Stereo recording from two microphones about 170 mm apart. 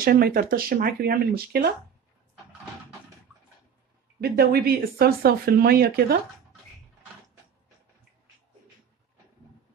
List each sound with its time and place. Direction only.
0.0 s speech: 60° right (ahead or behind)
4.2 s speech: 65° right (ahead or behind)